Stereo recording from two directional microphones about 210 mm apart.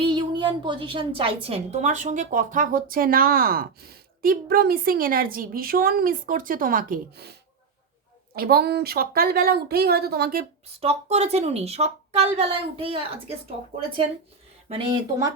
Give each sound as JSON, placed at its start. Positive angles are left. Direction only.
{"t": 0.0, "sound": "a woman's voice", "side_deg": -20}
{"t": 8.4, "sound": "a woman's voice", "side_deg": -45}
{"t": 10.8, "sound": "a woman's voice", "side_deg": -30}
{"t": 14.7, "sound": "a woman's voice", "side_deg": -20}